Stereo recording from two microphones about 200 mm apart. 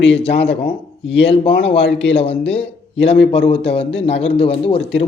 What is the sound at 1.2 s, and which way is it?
Speech, 25° left (ahead or behind).